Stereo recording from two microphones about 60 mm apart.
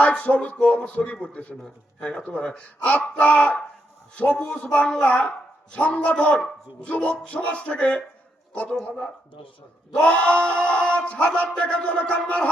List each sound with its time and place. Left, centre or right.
0.0 s speech: left
9.9 s speech: left